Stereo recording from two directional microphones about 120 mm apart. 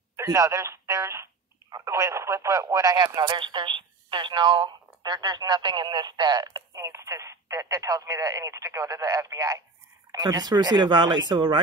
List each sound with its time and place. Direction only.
0.1 s speech: 25° right (ahead or behind)